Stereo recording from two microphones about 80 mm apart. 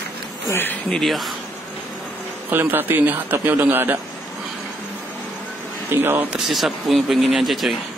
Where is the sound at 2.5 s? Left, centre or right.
Right.